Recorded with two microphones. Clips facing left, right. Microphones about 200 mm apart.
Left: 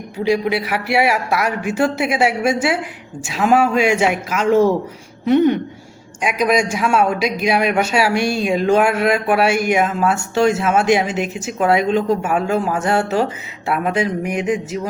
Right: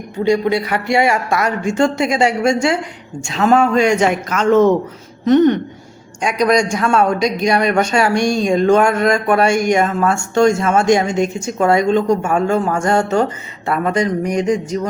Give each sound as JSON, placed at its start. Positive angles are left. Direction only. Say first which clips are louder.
{"t": 0.3, "sound": "a man's voice", "louder": "right 2 dB", "side_deg": 5}